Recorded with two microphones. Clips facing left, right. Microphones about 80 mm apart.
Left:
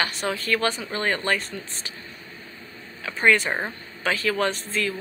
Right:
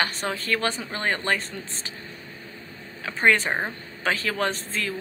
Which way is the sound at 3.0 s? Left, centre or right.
Right.